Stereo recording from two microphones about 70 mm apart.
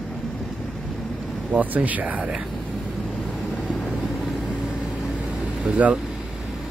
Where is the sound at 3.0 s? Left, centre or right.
Centre.